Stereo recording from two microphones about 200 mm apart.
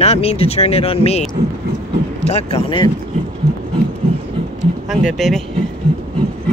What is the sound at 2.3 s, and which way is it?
Speech, 30° left (ahead or behind).